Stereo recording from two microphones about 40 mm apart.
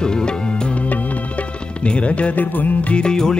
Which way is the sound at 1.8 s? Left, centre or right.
Left.